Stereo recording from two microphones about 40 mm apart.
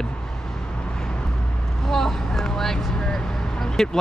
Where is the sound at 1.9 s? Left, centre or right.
Centre.